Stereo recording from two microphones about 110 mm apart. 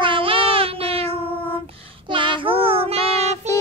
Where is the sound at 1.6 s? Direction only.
50° right (ahead or behind); by 3.4 s 70° right (ahead or behind).